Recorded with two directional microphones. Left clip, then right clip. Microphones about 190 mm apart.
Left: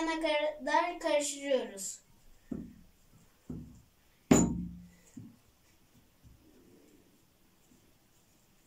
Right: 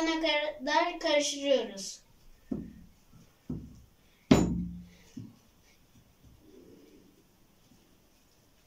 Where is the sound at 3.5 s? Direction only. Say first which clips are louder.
Right 4 dB; centre (ahead or behind).